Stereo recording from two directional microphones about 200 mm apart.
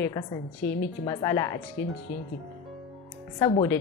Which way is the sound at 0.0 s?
15° left (ahead or behind).